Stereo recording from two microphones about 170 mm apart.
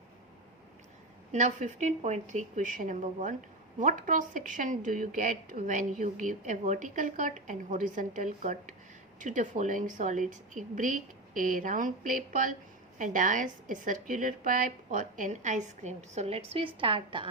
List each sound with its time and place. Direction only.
1.3 s a woman's voice: 50° right (ahead or behind); by 17.2 s 30° right (ahead or behind)